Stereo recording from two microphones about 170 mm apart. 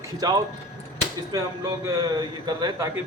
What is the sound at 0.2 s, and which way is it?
Speech, 25° right (ahead or behind).